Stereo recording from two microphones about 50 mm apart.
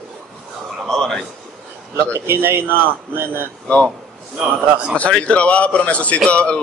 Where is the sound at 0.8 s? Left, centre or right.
Centre.